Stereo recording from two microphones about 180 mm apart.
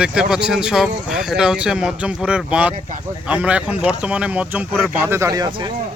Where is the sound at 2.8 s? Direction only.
45° right (ahead or behind).